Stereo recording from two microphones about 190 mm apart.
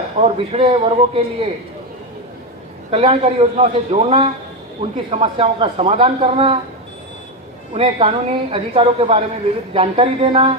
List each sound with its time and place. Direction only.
0.2 s a man's voice: 30° right (ahead or behind)
2.9 s a man's voice: 30° right (ahead or behind)
7.7 s a man's voice: 30° right (ahead or behind)